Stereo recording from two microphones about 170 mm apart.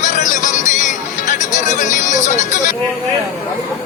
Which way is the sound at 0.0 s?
50° left (ahead or behind).